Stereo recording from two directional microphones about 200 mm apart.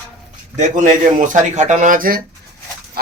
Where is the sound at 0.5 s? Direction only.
40° right (ahead or behind).